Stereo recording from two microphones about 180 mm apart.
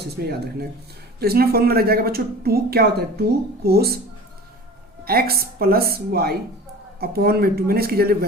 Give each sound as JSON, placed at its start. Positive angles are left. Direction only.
{"t": 1.2, "sound": "a woman's voice", "side_deg": -60}
{"t": 5.0, "sound": "a woman's voice", "side_deg": -55}